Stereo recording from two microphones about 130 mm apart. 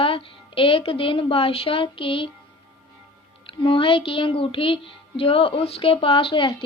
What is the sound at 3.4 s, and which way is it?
Speech, 40° left (ahead or behind).